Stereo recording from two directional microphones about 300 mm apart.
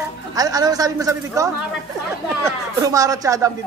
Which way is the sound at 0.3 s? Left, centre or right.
Centre.